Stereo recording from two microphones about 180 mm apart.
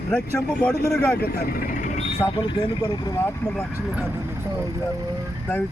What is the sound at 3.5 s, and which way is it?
Speech, centre (ahead or behind).